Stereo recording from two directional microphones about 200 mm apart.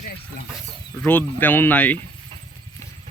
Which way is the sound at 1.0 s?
10° left (ahead or behind).